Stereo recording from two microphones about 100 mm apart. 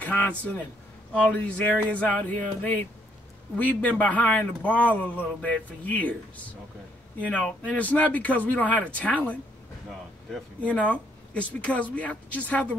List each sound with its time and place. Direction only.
0.0 s a man's voice: 15° left (ahead or behind)
1.7 s a man's voice: 15° left (ahead or behind)
10.6 s a man's voice: 15° left (ahead or behind)